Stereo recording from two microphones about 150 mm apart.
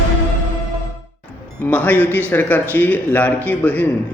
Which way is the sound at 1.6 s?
10° left (ahead or behind).